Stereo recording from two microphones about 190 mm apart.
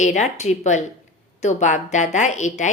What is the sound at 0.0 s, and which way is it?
Speech, 40° left (ahead or behind).